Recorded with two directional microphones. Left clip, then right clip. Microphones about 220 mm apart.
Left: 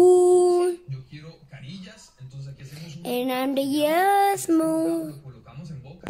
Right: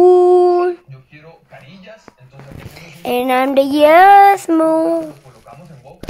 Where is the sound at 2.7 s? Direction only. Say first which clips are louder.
Right 10 dB; 15° right (ahead or behind).